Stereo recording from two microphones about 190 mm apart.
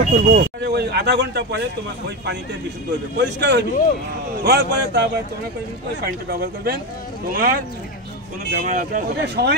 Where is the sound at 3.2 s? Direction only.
65° right (ahead or behind).